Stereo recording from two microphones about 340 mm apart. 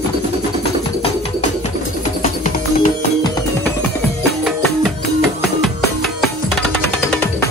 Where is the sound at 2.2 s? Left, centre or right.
Left.